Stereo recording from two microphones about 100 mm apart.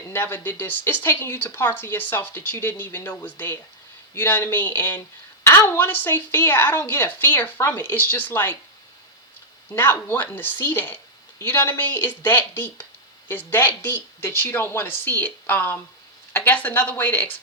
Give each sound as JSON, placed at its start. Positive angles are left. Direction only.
{"t": 0.1, "sound": "a woman's voice", "side_deg": 25}
{"t": 9.7, "sound": "a woman's voice", "side_deg": 20}